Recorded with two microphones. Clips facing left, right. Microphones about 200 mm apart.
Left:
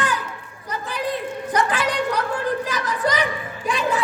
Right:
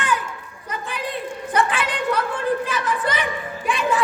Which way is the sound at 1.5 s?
40° left (ahead or behind).